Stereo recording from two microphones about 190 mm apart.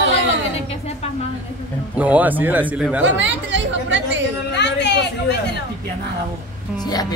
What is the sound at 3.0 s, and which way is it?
Chatter, 70° right (ahead or behind).